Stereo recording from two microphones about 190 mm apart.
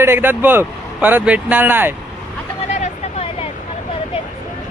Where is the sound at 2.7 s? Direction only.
35° left (ahead or behind).